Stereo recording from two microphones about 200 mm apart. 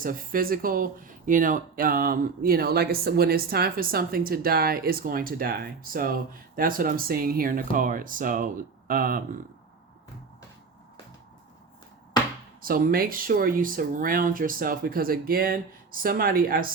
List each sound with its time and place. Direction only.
0.0 s speech: 45° right (ahead or behind)
12.6 s speech: 45° right (ahead or behind)